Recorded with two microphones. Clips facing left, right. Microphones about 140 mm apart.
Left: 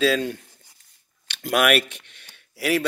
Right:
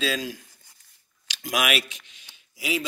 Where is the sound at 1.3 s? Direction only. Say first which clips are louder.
Left 6 dB; 55° left (ahead or behind).